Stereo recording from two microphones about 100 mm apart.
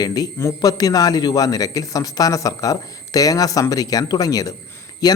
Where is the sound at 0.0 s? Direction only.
40° left (ahead or behind).